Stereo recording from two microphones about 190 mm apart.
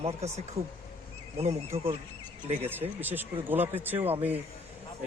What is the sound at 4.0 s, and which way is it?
Speech, 30° right (ahead or behind).